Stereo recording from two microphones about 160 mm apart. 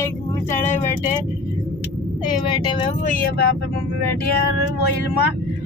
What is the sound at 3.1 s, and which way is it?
Speech, 70° left (ahead or behind).